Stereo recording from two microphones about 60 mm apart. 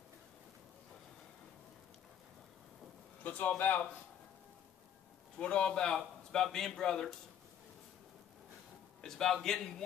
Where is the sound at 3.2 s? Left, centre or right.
Left.